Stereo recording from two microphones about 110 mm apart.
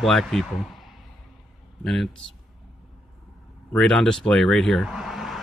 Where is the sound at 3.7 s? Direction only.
5° left (ahead or behind).